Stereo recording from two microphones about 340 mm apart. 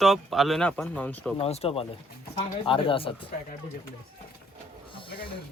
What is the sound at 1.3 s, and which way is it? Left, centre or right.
Speech, centre.